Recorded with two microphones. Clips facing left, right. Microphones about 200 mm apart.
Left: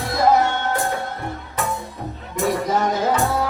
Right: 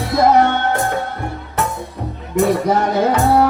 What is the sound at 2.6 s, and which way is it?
Music, 65° right (ahead or behind).